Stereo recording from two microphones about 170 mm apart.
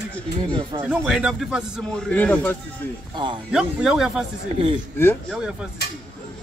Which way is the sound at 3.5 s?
5° right (ahead or behind).